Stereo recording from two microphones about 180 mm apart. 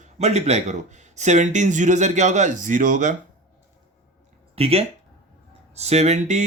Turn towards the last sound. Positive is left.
turn(degrees=-40)  # may be behind; listen again after turning